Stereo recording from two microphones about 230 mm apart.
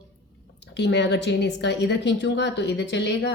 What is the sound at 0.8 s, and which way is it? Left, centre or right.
A woman's voice, left.